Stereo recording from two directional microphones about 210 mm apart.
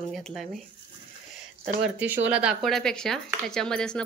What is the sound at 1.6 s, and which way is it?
Speech, 10° right (ahead or behind).